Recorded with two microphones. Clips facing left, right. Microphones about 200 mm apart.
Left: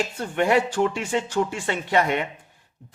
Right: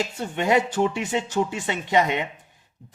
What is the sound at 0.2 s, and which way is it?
Speech, 20° right (ahead or behind).